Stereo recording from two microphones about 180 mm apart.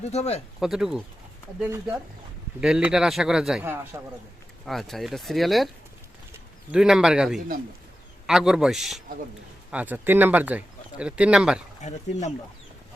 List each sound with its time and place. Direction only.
0.1 s speech: 35° left (ahead or behind)
0.6 s speech: centre (ahead or behind)
1.6 s speech: 15° right (ahead or behind)
2.6 s speech: 5° right (ahead or behind)
3.6 s speech: 15° right (ahead or behind)
4.6 s speech: centre (ahead or behind)
6.7 s speech: 5° right (ahead or behind)
11.8 s speech: 40° left (ahead or behind)